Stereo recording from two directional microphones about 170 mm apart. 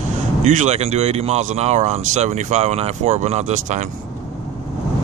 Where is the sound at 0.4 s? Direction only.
45° right (ahead or behind).